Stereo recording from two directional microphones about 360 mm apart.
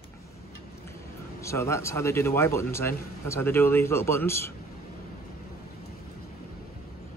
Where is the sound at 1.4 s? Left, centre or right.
Centre.